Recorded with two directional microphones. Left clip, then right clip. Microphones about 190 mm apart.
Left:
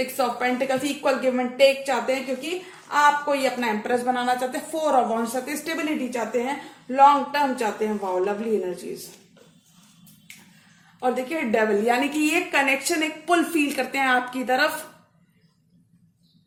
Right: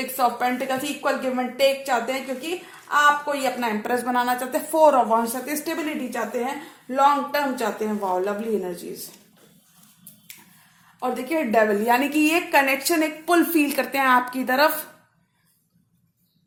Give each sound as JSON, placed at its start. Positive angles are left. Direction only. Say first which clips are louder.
{"t": 0.2, "sound": "a woman's voice", "louder": "right 3 dB", "side_deg": -30}
{"t": 11.0, "sound": "a woman's voice", "louder": "even", "side_deg": -35}